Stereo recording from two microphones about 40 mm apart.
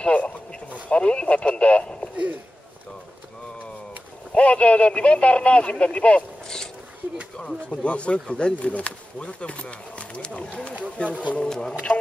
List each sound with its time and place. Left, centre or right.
0.0 s a sound: left
0.8 s radio: left
4.3 s speech: left
6.4 s a sound: centre
7.3 s speech: left
11.3 s speech: centre